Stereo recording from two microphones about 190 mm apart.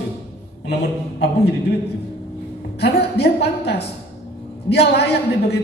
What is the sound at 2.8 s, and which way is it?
A man's voice, 60° left (ahead or behind).